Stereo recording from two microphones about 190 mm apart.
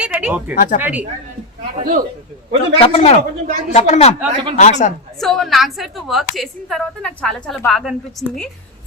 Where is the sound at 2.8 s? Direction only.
30° left (ahead or behind).